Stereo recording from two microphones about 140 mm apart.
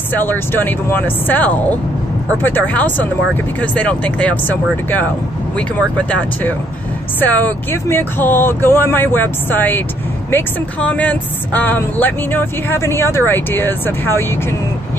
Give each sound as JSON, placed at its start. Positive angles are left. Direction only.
{"t": 0.1, "sound": "speech", "side_deg": 15}